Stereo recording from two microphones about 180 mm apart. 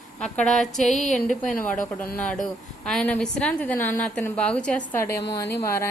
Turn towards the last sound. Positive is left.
turn(degrees=15)  # may be behind; listen again after turning